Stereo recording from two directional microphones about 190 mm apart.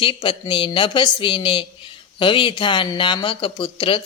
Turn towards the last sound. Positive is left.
turn(degrees=30)  # may be behind; listen again after turning